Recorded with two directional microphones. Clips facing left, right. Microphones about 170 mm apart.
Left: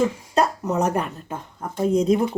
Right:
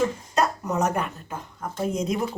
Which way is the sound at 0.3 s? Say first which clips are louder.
Left 3 dB; 30° left (ahead or behind).